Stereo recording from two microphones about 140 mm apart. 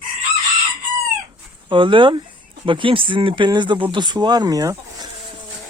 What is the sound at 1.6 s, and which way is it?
Speech, 35° right (ahead or behind).